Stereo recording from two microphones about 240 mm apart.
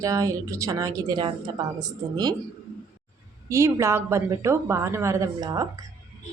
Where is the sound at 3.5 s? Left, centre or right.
Centre.